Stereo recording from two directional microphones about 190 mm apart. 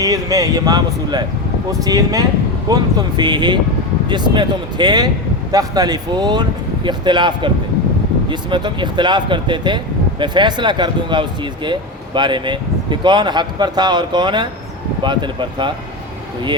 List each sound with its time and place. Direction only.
0.0 s speech: 20° right (ahead or behind)